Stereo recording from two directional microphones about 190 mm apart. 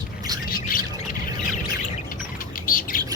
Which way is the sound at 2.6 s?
45° left (ahead or behind).